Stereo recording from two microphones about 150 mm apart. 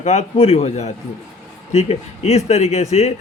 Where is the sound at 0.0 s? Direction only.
45° left (ahead or behind).